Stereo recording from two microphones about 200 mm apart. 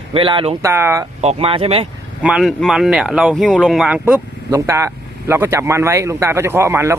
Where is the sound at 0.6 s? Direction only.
15° right (ahead or behind).